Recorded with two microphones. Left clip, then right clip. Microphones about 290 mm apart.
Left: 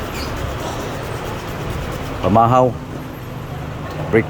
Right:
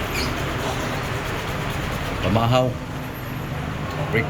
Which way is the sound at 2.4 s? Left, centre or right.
Centre.